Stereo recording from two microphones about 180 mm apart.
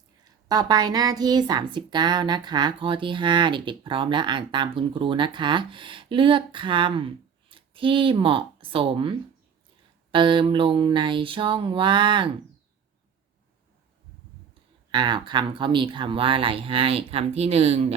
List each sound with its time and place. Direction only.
0.4 s a woman's voice: 20° right (ahead or behind)
14.9 s a woman's voice: 25° right (ahead or behind)